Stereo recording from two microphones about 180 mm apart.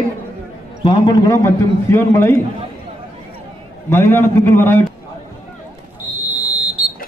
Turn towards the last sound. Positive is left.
turn(degrees=-10)  # may be behind; listen again after turning